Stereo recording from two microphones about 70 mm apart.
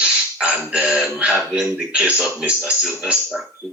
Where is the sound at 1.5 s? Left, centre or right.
Centre.